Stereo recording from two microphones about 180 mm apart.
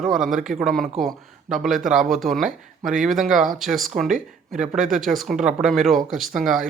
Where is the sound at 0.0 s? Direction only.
5° right (ahead or behind).